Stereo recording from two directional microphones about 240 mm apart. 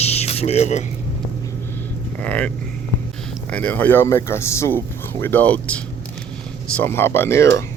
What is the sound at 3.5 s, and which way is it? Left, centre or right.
Speech, centre.